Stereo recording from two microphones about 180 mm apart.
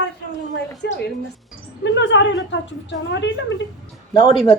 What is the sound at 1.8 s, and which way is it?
A woman's voice, 85° left.